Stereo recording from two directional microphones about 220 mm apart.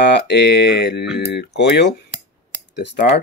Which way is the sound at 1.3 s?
50° left (ahead or behind).